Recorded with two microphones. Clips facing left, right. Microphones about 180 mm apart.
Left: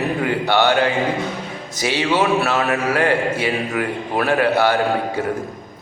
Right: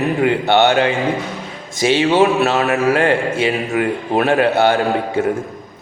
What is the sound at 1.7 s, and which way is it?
Speech, 25° right (ahead or behind).